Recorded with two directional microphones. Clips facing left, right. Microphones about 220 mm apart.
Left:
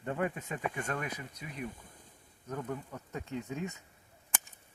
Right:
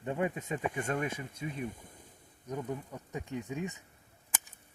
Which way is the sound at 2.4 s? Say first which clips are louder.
Right 1 dB; 15° right (ahead or behind).